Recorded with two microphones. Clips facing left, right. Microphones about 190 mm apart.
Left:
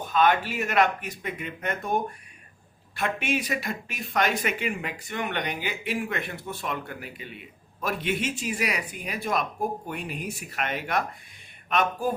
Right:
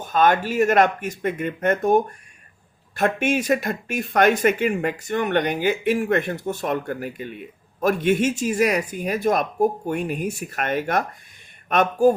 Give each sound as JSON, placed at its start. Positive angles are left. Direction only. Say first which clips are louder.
{"t": 0.1, "sound": "speech", "louder": "right 4 dB", "side_deg": -45}